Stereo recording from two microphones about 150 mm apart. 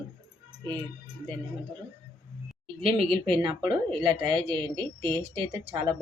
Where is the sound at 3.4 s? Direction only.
30° right (ahead or behind).